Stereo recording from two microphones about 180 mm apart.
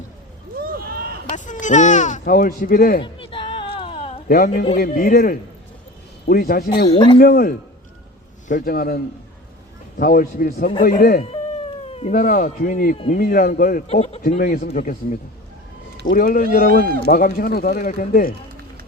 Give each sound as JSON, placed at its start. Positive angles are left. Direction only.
{"t": 0.6, "sound": "a sound", "side_deg": -55}
{"t": 1.3, "sound": "a sound", "side_deg": 45}
{"t": 3.0, "sound": "a sound", "side_deg": 30}
{"t": 4.3, "sound": "speech", "side_deg": 55}
{"t": 6.8, "sound": "speech", "side_deg": 30}
{"t": 7.2, "sound": "speech", "side_deg": 55}
{"t": 10.0, "sound": "speech", "side_deg": 55}
{"t": 11.3, "sound": "speech", "side_deg": 35}
{"t": 13.8, "sound": "speech", "side_deg": 35}
{"t": 14.2, "sound": "speech", "side_deg": 50}